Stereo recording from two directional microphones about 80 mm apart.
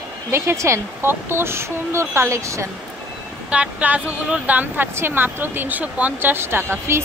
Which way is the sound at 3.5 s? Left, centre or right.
Centre.